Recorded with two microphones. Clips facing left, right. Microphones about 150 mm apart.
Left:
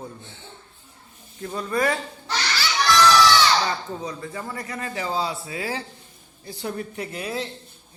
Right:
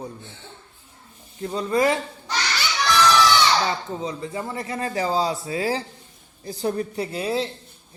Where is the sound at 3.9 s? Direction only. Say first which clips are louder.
Right 3 dB; 20° right (ahead or behind).